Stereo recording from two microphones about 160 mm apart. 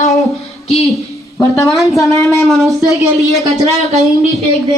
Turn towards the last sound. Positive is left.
turn(degrees=-20)  # may be behind; listen again after turning